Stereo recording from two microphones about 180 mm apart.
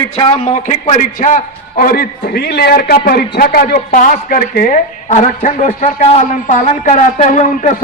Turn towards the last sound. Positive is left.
turn(degrees=40)  # may be behind; listen again after turning